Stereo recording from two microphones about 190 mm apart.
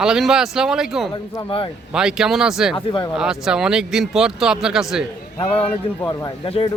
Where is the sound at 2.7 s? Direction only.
25° left (ahead or behind).